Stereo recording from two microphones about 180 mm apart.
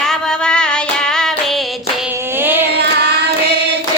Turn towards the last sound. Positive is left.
turn(degrees=-65)  # may be behind; listen again after turning